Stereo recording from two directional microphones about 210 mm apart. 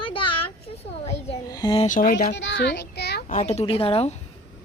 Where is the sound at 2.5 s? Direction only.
55° left (ahead or behind).